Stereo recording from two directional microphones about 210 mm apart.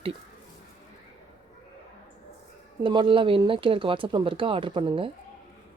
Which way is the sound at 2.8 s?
20° right (ahead or behind).